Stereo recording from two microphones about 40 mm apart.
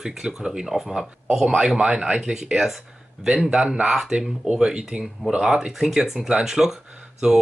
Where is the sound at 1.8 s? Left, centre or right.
Right.